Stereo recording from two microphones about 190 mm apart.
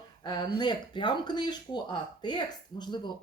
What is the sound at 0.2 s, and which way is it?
A woman's voice, 20° left (ahead or behind).